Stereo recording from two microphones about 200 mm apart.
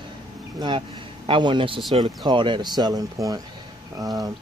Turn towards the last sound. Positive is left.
turn(degrees=-20)  # may be behind; listen again after turning